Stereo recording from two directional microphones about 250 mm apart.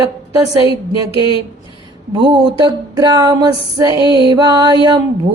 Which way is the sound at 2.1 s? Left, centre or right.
Centre.